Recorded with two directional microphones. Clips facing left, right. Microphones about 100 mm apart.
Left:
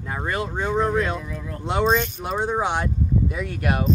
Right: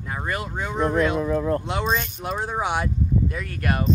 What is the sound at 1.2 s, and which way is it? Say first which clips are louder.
Speech: right 12 dB; 45° right (ahead or behind).